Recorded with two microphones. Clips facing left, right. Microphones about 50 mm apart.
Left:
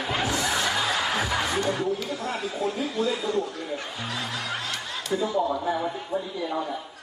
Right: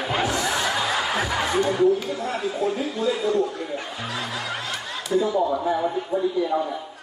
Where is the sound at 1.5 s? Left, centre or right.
Centre.